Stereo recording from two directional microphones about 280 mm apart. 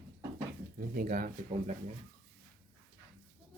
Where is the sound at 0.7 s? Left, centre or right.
Right.